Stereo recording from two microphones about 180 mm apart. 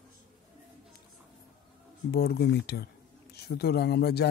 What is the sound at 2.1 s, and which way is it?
Speech, 60° left (ahead or behind).